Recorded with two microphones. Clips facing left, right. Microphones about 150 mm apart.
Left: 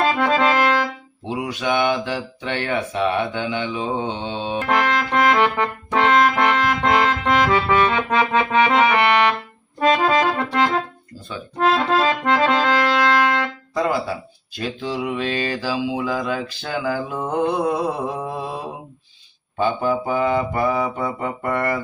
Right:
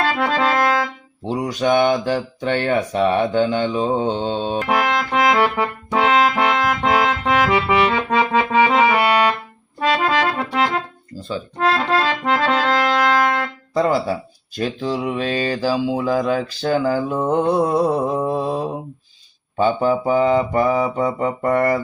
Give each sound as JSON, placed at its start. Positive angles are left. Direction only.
{"t": 0.2, "sound": "music", "side_deg": 0}
{"t": 1.3, "sound": "speech", "side_deg": -40}
{"t": 4.6, "sound": "music", "side_deg": -5}
{"t": 10.3, "sound": "organ", "side_deg": -5}
{"t": 11.5, "sound": "accordion", "side_deg": 0}
{"t": 13.7, "sound": "speech", "side_deg": -40}
{"t": 17.1, "sound": "speech", "side_deg": -30}
{"t": 18.3, "sound": "mantra", "side_deg": -40}
{"t": 19.5, "sound": "speech", "side_deg": -35}